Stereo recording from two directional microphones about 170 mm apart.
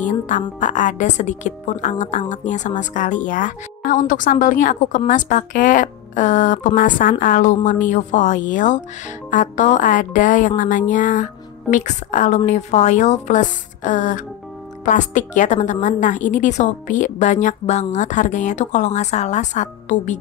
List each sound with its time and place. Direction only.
0.0 s a woman's voice: 45° left (ahead or behind)